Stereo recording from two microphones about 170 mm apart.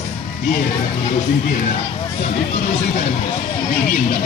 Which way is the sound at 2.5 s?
40° left (ahead or behind).